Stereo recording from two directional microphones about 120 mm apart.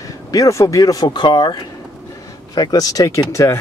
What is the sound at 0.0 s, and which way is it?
Speech, 30° left (ahead or behind).